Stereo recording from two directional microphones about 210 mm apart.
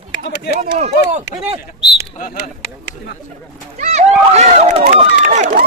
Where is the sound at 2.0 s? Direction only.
50° left (ahead or behind).